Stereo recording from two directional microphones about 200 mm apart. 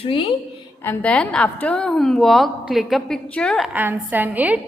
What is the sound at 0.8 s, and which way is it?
A woman's voice, 10° left (ahead or behind).